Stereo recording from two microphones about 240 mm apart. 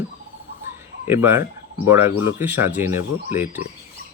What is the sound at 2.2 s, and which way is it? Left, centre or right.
A man's voice, centre.